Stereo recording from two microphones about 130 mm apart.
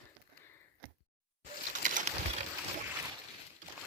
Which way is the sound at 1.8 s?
80° right.